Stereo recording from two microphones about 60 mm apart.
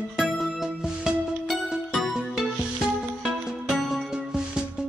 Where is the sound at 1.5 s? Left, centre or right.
Centre.